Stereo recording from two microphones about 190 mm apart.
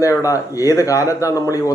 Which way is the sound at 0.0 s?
15° left (ahead or behind).